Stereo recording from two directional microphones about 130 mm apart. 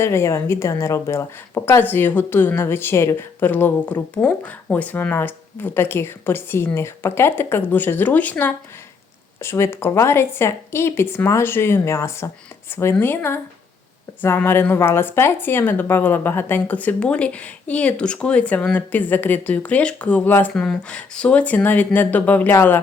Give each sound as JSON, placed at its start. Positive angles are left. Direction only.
{"t": 0.0, "sound": "a woman's voice", "side_deg": 20}